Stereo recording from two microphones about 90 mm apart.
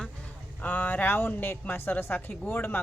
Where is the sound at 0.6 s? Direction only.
20° left (ahead or behind).